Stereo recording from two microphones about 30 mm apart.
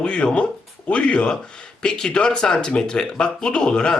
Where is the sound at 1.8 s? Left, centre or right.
Left.